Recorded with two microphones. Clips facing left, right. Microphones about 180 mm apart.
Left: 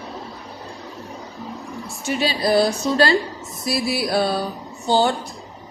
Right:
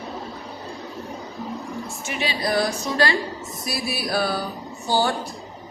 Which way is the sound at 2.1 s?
35° left (ahead or behind).